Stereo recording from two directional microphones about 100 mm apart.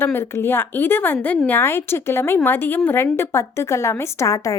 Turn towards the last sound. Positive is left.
turn(degrees=30)  # may be behind; listen again after turning